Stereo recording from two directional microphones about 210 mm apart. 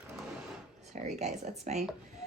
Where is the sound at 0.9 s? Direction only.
35° right (ahead or behind).